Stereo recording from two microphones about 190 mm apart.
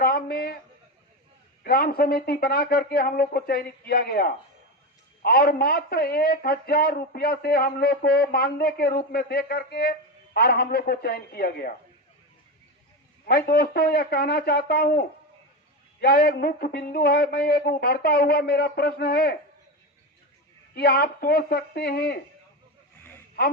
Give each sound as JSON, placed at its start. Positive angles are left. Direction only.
{"t": 0.0, "sound": "a sound", "side_deg": 55}
{"t": 1.6, "sound": "speech", "side_deg": 50}
{"t": 13.2, "sound": "speech", "side_deg": 50}
{"t": 20.7, "sound": "speech", "side_deg": 55}